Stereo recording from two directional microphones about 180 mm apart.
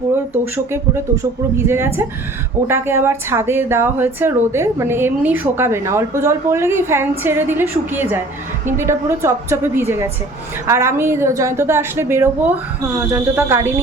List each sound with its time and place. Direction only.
0.5 s speech: 15° right (ahead or behind)